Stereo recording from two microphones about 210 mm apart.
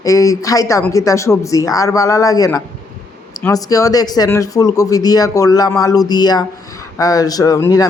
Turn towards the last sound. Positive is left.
turn(degrees=15)  # may be behind; listen again after turning